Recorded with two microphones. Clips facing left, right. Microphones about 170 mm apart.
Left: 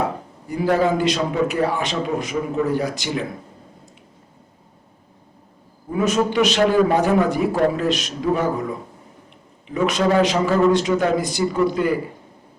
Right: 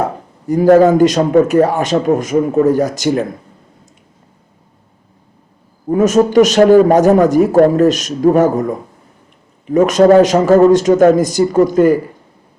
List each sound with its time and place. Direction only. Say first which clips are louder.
0.0 s a man's voice: right 5 dB; 45° right (ahead or behind)
5.9 s a man's voice: right 9 dB; 45° right (ahead or behind)